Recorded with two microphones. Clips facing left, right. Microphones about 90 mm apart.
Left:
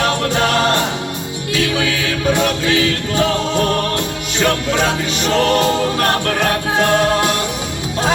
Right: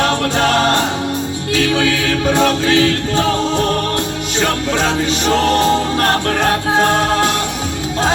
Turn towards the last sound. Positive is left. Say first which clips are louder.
# right 1 dB
turn(degrees=-35)  # may be behind; listen again after turning